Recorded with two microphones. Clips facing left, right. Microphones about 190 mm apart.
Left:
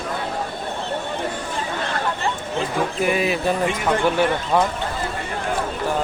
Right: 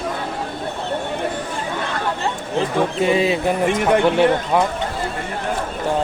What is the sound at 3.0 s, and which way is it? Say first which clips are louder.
Speech: right 3 dB; 25° right (ahead or behind).